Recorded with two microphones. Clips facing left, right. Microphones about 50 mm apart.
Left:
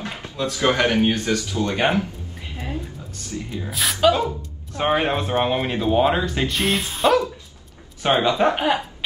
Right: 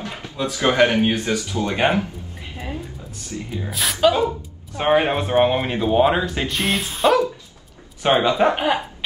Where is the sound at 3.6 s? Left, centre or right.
Centre.